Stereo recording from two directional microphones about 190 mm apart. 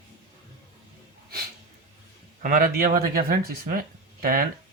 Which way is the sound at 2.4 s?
45° right (ahead or behind).